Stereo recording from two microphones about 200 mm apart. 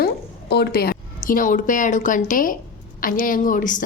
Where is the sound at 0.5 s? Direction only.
50° left (ahead or behind).